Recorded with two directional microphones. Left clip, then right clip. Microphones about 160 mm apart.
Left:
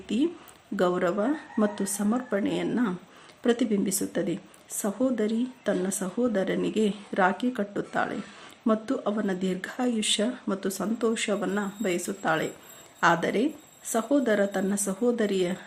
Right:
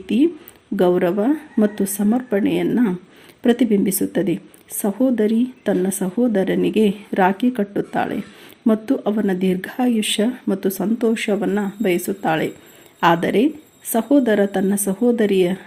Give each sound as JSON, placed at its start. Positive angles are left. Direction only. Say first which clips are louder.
{"t": 0.0, "sound": "speech", "louder": "right 10 dB", "side_deg": -20}